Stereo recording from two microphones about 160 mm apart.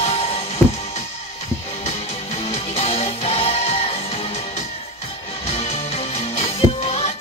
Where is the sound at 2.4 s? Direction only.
40° left (ahead or behind).